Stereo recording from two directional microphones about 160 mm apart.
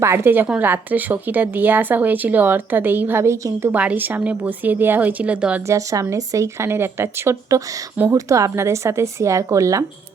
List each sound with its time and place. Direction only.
0.0 s a woman's voice: 15° right (ahead or behind)
5.6 s a woman's voice: 20° right (ahead or behind)